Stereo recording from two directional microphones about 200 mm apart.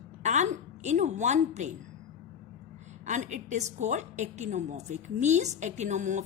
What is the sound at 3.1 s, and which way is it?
A woman's voice, 35° right (ahead or behind).